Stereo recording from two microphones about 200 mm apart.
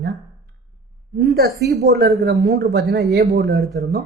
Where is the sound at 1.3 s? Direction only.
55° right (ahead or behind).